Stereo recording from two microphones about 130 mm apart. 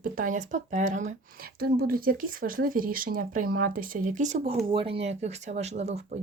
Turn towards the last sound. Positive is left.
turn(degrees=-60)  # may be behind; listen again after turning